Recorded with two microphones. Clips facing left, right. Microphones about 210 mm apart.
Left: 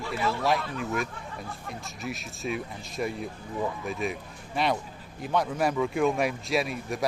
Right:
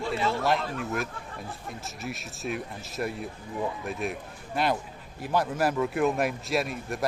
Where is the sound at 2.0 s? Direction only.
Centre (ahead or behind).